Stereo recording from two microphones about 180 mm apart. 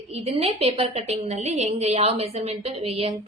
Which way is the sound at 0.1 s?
35° right (ahead or behind).